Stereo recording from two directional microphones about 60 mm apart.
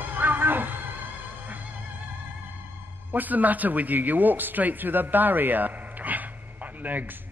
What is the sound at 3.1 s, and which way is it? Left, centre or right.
A man's voice, right.